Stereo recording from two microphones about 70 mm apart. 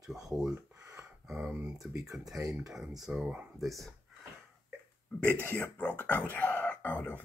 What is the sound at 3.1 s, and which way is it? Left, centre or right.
Speech, right.